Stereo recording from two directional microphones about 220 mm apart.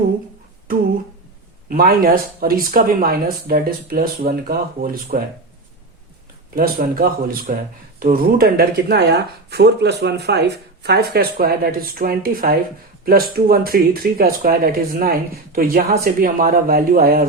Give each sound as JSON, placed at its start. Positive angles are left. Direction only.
{"t": 1.7, "sound": "speech", "side_deg": -40}
{"t": 6.6, "sound": "speech", "side_deg": -40}